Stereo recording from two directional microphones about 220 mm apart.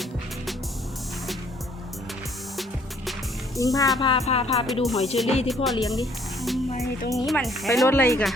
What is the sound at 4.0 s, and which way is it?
Music, 25° left (ahead or behind).